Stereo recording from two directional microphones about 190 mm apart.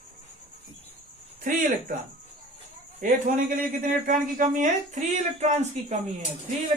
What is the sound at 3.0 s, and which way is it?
A man's voice, 45° right (ahead or behind).